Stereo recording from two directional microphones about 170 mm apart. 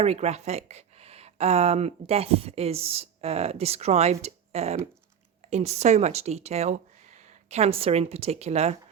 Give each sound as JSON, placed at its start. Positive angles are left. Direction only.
{"t": 0.0, "sound": "speech", "side_deg": -40}